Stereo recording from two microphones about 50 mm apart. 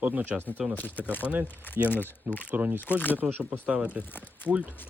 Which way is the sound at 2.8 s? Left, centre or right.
Left.